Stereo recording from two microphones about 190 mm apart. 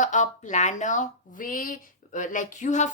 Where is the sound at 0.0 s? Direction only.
40° left (ahead or behind).